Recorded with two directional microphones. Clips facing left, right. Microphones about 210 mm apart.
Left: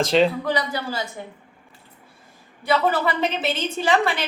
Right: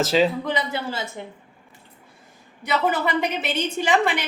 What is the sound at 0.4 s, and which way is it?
Speech, 20° right (ahead or behind).